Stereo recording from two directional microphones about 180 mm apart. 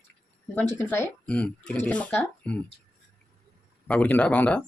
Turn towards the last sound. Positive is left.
turn(degrees=10)  # may be behind; listen again after turning